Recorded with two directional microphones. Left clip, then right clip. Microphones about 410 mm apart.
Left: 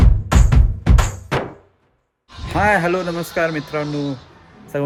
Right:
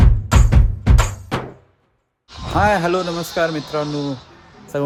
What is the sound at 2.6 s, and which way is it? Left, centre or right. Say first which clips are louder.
Speech: even; centre.